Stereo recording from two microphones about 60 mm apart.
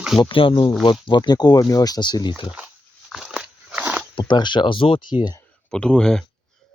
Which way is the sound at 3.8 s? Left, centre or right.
Right.